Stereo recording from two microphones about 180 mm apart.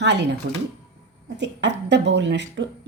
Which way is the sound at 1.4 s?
75° right (ahead or behind).